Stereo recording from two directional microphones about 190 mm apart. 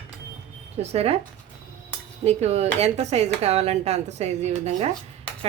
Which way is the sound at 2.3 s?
35° right (ahead or behind).